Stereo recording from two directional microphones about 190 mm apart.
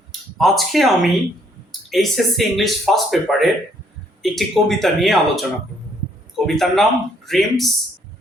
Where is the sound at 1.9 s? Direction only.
Centre (ahead or behind).